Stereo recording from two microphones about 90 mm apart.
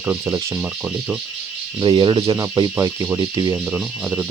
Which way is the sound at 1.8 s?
60° right (ahead or behind).